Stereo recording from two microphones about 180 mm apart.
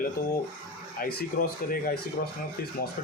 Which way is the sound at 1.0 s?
55° left (ahead or behind).